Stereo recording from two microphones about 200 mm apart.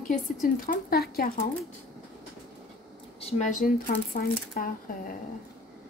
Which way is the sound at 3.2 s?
35° left (ahead or behind).